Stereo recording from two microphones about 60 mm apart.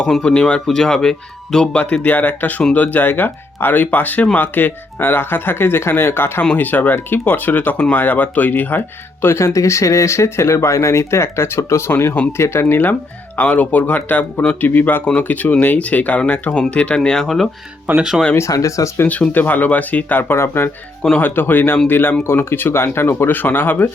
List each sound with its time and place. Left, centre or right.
0.0 s speech: centre
1.7 s speech: left
6.5 s speech: left
9.2 s speech: left; by 17.5 s centre
17.9 s speech: right
18.3 s speech: left
19.0 s speech: left
20.4 s speech: left
21.2 s speech: left